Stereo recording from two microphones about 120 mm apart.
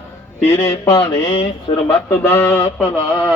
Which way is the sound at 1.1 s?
45° left (ahead or behind).